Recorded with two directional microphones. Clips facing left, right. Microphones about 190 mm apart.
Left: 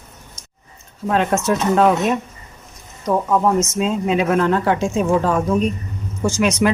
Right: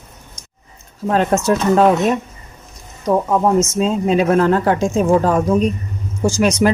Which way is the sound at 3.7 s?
35° right (ahead or behind).